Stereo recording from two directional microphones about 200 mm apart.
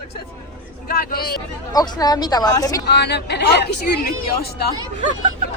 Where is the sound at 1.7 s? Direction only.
20° left (ahead or behind).